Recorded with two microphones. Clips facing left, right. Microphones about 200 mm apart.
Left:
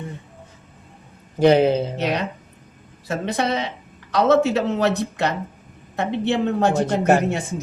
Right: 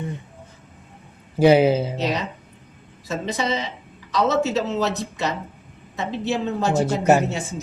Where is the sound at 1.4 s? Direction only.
5° right (ahead or behind).